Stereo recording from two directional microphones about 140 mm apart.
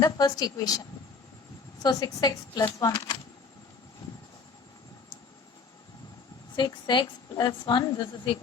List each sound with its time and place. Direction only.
0.0 s speech: 25° left (ahead or behind)
1.8 s speech: 30° left (ahead or behind)
6.6 s a woman's voice: 35° left (ahead or behind)